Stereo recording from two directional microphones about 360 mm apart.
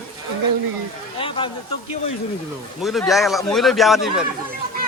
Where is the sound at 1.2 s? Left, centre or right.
Centre.